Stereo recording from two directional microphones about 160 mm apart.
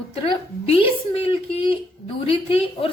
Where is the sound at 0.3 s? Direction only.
35° left (ahead or behind).